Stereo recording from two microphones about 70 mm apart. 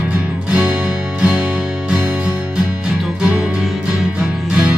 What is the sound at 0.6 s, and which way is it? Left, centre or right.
Music, centre.